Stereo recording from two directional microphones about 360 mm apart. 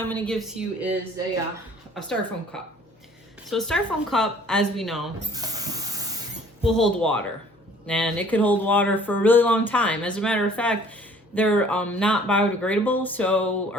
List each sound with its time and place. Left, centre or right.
0.0 s speech: centre
2.0 s speech: centre
5.2 s hiss: centre
6.7 s speech: centre